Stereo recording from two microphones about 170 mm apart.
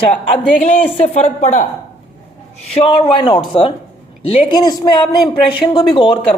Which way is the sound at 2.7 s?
30° left (ahead or behind).